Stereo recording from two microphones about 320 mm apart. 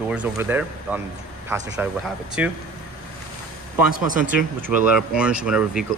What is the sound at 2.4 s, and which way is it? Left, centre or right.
Speech, centre.